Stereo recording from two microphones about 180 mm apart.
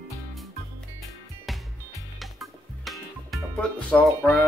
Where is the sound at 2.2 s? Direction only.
Centre (ahead or behind).